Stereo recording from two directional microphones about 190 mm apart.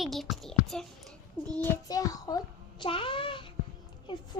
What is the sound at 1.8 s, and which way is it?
A child's voice, 20° left (ahead or behind).